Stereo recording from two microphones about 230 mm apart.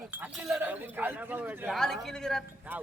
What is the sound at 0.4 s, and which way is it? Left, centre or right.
A man's voice, centre.